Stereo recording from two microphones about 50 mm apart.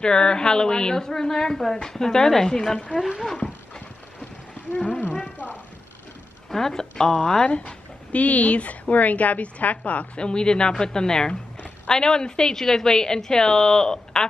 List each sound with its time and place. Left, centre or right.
0.0 s a woman's voice: centre
3.0 s speech: centre
3.3 s dog: centre
4.7 s a woman's voice: centre
6.5 s a woman's voice: centre